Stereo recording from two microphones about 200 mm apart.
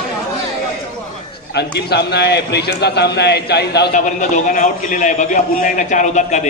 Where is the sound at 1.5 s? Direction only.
55° left (ahead or behind).